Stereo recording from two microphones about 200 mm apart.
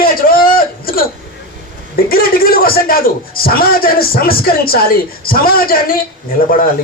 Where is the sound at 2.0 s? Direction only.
45° left (ahead or behind).